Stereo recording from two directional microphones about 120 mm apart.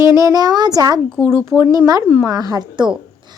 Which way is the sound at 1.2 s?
20° right (ahead or behind).